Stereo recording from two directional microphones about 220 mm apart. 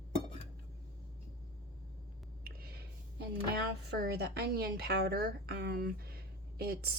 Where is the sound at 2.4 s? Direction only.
45° right (ahead or behind).